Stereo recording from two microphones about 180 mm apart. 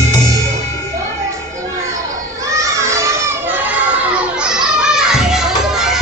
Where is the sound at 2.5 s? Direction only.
15° right (ahead or behind).